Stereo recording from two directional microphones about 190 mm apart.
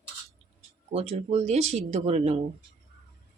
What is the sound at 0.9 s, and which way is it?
Speech, 30° right (ahead or behind).